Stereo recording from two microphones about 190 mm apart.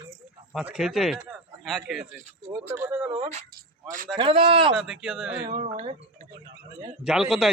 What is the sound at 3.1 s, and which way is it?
Speech, 30° right (ahead or behind).